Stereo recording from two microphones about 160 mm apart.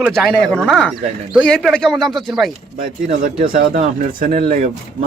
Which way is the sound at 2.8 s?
60° right (ahead or behind).